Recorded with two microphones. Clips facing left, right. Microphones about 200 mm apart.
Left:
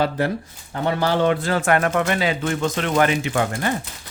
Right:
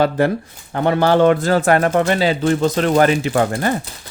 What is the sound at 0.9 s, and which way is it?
Speech, 55° right (ahead or behind).